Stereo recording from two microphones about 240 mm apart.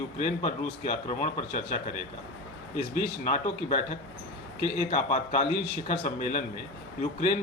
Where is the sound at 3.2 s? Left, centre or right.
Left.